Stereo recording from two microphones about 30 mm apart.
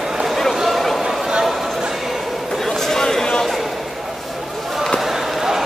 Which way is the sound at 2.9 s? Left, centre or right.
Centre.